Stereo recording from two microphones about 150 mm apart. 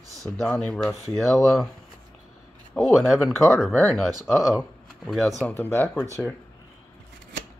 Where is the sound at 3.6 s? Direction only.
Centre (ahead or behind).